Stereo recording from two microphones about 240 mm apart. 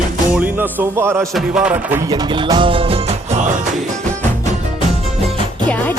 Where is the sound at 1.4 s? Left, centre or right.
Centre.